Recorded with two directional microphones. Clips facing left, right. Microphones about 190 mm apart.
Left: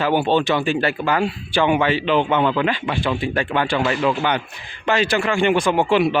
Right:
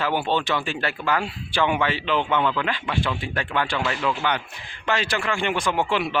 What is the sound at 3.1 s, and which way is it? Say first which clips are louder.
Speech: left 7 dB; 5° left (ahead or behind).